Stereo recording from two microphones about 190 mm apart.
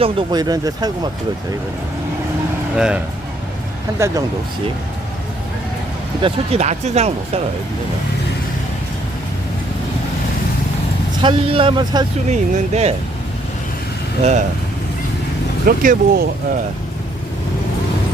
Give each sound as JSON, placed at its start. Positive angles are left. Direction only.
{"t": 0.0, "sound": "speech", "side_deg": -25}
{"t": 2.7, "sound": "speech", "side_deg": -5}
{"t": 3.9, "sound": "speech", "side_deg": -15}
{"t": 6.2, "sound": "speech", "side_deg": -35}
{"t": 11.2, "sound": "speech", "side_deg": -25}
{"t": 12.3, "sound": "speech", "side_deg": -35}
{"t": 14.2, "sound": "speech", "side_deg": -35}
{"t": 15.6, "sound": "speech", "side_deg": -50}